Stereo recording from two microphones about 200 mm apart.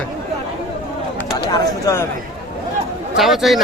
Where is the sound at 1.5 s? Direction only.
15° left (ahead or behind).